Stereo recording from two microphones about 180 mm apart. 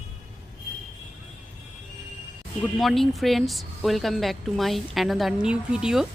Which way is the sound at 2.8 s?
Centre (ahead or behind).